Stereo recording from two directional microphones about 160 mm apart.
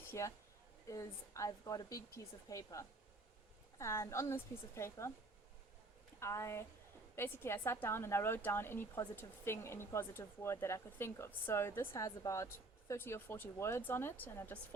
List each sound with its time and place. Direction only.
0.1 s a woman's voice: 15° left (ahead or behind)
6.1 s a woman's voice: 15° left (ahead or behind)